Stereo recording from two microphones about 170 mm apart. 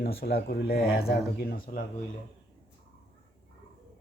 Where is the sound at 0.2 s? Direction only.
65° left (ahead or behind).